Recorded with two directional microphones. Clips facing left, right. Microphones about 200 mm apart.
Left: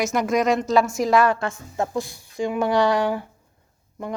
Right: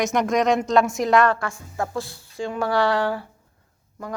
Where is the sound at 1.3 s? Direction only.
20° left (ahead or behind).